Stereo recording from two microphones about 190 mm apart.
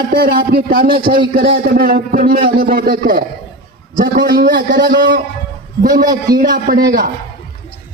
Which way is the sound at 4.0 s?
65° right (ahead or behind).